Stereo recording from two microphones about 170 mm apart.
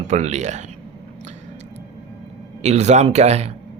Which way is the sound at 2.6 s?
40° right (ahead or behind).